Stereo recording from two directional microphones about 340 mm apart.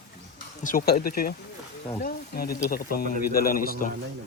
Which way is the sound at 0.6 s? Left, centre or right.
Left.